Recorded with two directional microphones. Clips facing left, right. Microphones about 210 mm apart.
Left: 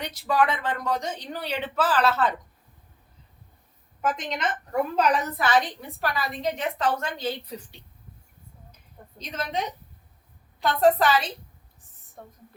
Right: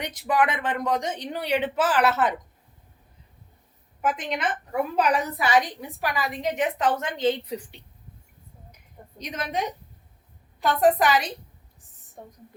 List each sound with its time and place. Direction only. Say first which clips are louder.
0.0 s speech: even; 20° right (ahead or behind)
4.0 s a woman's voice: right 1 dB; 10° right (ahead or behind)
8.7 s a sound: right 2 dB; 15° right (ahead or behind)
10.6 s a woman's voice: even; 15° right (ahead or behind)